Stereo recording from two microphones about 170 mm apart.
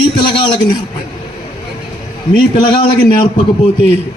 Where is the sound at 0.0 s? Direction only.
30° left (ahead or behind).